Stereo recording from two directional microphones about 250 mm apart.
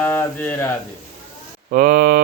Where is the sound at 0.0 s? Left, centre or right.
Centre.